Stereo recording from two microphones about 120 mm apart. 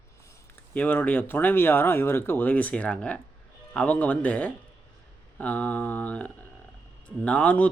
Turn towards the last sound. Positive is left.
turn(degrees=10)  # may be behind; listen again after turning